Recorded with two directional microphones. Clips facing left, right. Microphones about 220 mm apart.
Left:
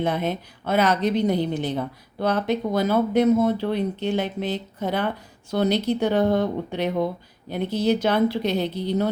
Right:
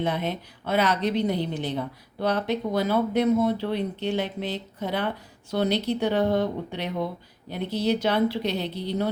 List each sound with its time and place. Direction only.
0.0 s a woman's voice: 45° left (ahead or behind)